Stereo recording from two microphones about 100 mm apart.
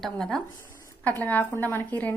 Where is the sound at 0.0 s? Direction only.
5° left (ahead or behind).